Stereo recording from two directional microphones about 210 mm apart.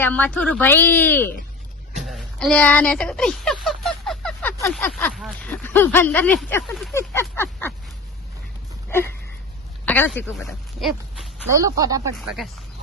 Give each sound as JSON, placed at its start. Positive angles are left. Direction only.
{"t": 0.0, "sound": "a woman's voice", "side_deg": 5}
{"t": 2.0, "sound": "a sound", "side_deg": 0}
{"t": 4.7, "sound": "speech", "side_deg": 5}
{"t": 6.9, "sound": "a sound", "side_deg": 10}
{"t": 9.8, "sound": "speech", "side_deg": 10}
{"t": 11.5, "sound": "speech", "side_deg": -15}
{"t": 12.1, "sound": "speech", "side_deg": 0}